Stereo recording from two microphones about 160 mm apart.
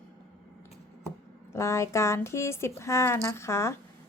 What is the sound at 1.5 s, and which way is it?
A woman's voice, 20° left (ahead or behind).